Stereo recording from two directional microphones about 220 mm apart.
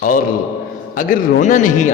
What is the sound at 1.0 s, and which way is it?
Speech, 35° left (ahead or behind).